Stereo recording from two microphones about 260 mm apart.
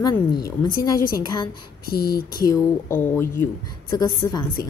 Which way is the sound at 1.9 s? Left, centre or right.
Left.